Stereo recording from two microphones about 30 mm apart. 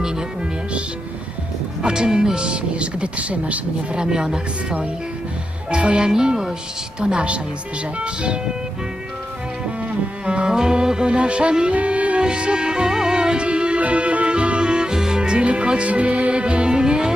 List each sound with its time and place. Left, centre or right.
0.0 s speech: right
1.8 s speech: right
3.9 s music: right
5.7 s speech: right
6.1 s music: right
7.2 s music: right
7.9 s speech: right
9.6 s music: right
12.2 s music: right
14.9 s music: centre
15.2 s music: right
15.9 s music: right
16.3 s music: right
16.7 s music: right